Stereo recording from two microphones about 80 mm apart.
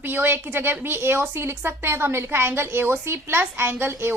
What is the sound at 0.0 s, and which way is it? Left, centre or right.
A woman's voice, right.